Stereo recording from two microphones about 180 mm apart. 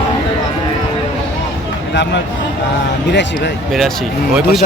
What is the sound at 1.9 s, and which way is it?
Speech, 75° left (ahead or behind).